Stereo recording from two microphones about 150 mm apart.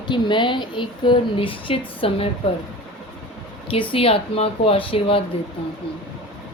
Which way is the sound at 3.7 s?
35° left (ahead or behind).